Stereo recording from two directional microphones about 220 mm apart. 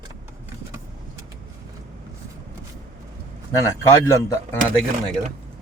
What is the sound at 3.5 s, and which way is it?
Speech, 15° left (ahead or behind).